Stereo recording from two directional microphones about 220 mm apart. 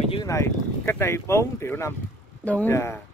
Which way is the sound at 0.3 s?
10° left (ahead or behind).